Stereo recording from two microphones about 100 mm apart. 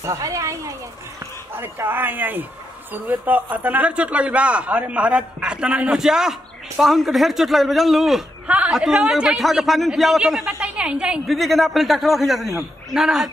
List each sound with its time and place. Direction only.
0.0 s speech: 30° right (ahead or behind)
1.6 s a man's voice: 20° right (ahead or behind); by 8.2 s centre (ahead or behind)
8.5 s a man's voice: 10° right (ahead or behind)
11.2 s a man's voice: centre (ahead or behind)